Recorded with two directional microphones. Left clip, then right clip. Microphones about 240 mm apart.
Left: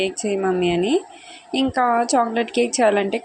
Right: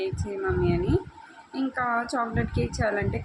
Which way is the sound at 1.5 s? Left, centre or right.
Left.